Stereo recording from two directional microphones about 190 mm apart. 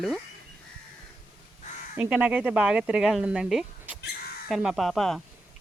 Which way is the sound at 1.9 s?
5° right (ahead or behind).